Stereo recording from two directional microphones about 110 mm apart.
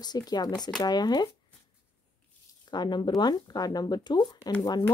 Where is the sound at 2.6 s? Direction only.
40° left (ahead or behind).